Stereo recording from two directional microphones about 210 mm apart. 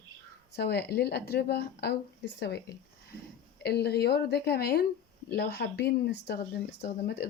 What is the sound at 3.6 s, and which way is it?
Speech, 50° left (ahead or behind).